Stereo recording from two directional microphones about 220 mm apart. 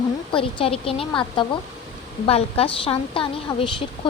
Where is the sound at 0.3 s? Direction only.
25° left (ahead or behind).